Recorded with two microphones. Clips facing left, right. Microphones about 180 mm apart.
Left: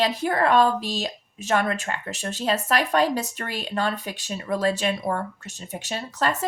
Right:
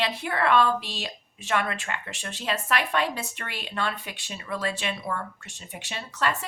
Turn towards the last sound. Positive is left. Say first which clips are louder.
# left 3 dB
turn(degrees=40)  # may be behind; listen again after turning